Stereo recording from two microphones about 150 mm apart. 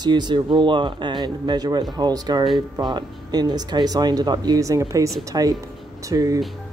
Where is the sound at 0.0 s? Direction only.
30° right (ahead or behind).